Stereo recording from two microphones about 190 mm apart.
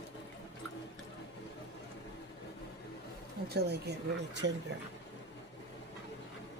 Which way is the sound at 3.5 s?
60° right (ahead or behind).